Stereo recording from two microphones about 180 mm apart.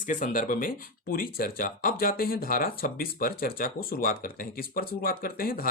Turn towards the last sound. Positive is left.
turn(degrees=55)  # may be behind; listen again after turning